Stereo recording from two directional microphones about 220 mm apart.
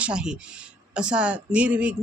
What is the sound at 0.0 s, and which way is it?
Speech, 5° right (ahead or behind).